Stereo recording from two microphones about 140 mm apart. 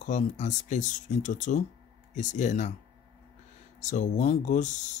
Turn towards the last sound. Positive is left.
turn(degrees=60)  # may be behind; listen again after turning